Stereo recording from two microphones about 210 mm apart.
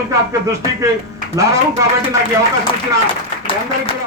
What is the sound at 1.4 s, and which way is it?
Speech, 15° right (ahead or behind).